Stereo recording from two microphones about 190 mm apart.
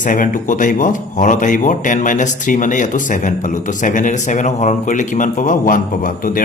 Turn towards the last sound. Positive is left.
turn(degrees=45)  # may be behind; listen again after turning